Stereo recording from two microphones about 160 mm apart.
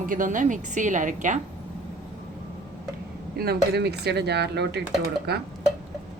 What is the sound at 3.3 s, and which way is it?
Speech, 85° right.